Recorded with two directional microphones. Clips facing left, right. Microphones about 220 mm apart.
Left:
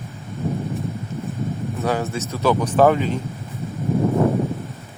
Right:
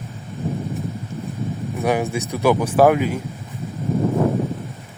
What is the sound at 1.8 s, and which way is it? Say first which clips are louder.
Speech: right 3 dB; 15° right (ahead or behind).